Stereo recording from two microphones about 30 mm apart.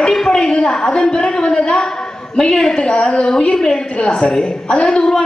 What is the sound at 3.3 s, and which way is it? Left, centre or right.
A man's voice, left.